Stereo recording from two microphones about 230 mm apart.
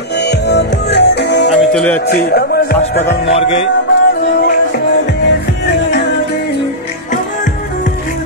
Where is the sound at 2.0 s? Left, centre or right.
Left.